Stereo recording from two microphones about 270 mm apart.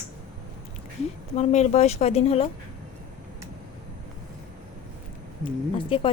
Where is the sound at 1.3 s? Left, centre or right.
Left.